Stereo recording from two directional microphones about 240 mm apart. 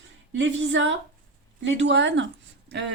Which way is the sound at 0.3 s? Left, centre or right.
Right.